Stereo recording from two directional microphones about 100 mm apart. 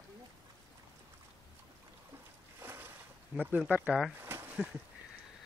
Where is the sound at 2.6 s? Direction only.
20° right (ahead or behind).